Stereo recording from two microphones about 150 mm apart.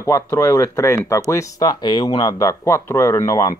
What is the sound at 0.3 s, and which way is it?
Speech, 25° left (ahead or behind).